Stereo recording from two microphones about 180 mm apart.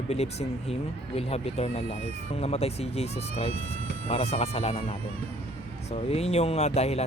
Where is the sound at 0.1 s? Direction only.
35° left (ahead or behind).